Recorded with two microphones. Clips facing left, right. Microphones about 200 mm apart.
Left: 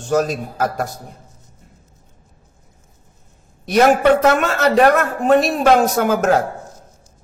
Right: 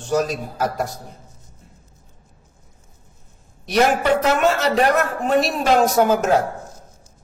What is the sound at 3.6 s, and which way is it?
A man's voice, 55° left (ahead or behind).